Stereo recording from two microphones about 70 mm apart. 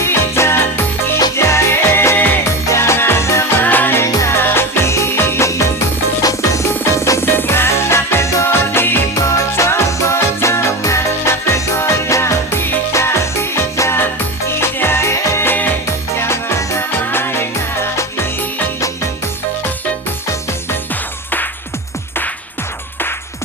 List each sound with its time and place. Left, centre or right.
0.0 s music: left
3.6 s music: left
4.0 s music: left
6.2 s music: left
7.3 s music: left
9.1 s music: left